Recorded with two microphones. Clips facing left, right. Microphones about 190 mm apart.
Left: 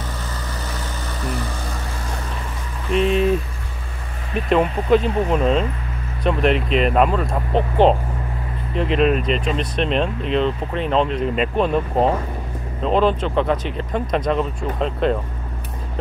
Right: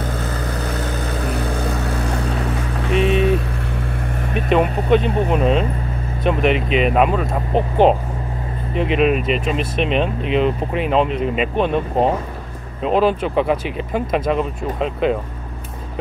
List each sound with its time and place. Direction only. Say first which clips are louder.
1.2 s vehicle: right 3 dB; 60° right (ahead or behind)
4.5 s speech: right 1 dB; centre (ahead or behind)